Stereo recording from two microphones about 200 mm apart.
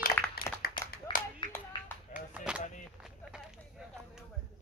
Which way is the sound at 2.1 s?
5° right (ahead or behind).